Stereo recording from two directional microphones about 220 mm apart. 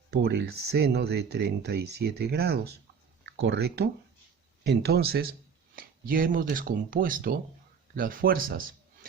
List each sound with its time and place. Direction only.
0.1 s a man's voice: 50° right (ahead or behind)